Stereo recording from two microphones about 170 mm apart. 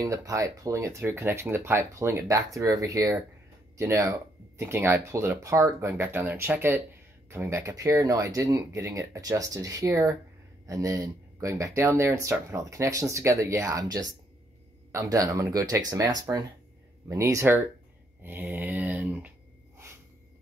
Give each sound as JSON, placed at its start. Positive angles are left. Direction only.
{"t": 0.0, "sound": "speech", "side_deg": -20}